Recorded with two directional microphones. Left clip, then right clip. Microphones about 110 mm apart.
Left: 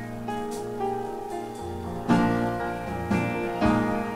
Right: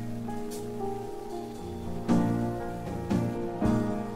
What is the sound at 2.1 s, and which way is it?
Music, 30° left (ahead or behind).